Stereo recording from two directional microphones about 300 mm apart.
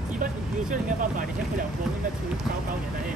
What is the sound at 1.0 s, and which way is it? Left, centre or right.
Vehicle, right.